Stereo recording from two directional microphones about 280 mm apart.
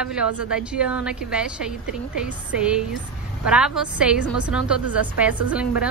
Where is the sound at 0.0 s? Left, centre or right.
Centre.